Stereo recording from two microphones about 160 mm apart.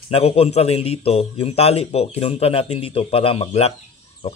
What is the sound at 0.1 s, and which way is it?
Speech, 40° left (ahead or behind).